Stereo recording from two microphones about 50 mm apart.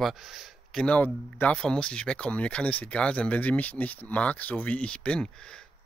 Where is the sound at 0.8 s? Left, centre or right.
Left.